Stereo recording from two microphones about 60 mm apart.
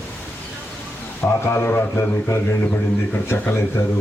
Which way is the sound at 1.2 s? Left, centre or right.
Left.